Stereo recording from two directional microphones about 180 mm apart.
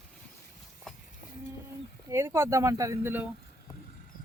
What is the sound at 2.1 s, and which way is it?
Speech, 15° right (ahead or behind).